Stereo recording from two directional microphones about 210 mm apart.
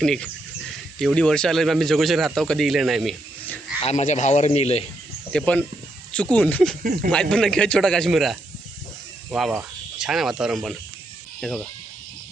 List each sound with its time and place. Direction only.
0.0 s speech: centre (ahead or behind)
3.8 s speech: 35° left (ahead or behind)
5.3 s speech: 5° left (ahead or behind)
6.8 s speech: 40° right (ahead or behind)
7.1 s speech: 5° left (ahead or behind)